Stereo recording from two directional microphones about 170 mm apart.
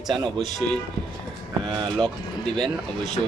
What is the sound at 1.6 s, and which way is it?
Speech, 25° right (ahead or behind).